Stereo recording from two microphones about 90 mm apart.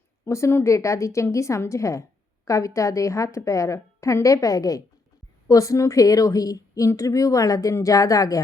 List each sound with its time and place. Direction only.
0.3 s a woman's voice: 30° left (ahead or behind)